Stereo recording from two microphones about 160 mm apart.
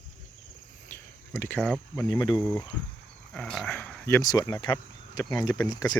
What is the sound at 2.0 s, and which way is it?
Speech, 25° left (ahead or behind).